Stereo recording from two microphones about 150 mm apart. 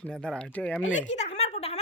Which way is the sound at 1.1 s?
50° left (ahead or behind).